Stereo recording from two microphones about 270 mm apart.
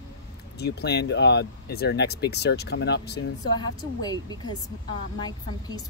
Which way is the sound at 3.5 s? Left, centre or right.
Centre.